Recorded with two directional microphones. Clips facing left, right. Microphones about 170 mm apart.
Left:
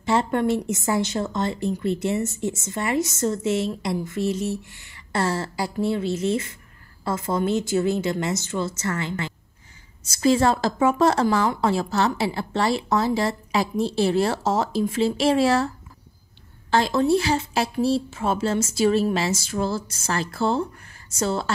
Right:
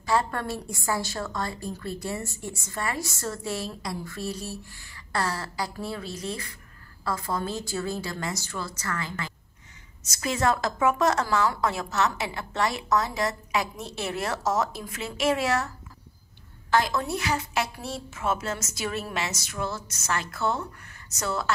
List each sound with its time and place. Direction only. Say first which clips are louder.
0.0 s speech: left 5 dB; 25° left (ahead or behind)
16.7 s speech: left 6 dB; 30° left (ahead or behind)